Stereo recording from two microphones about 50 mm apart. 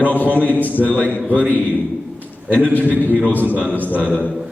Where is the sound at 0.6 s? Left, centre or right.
Left.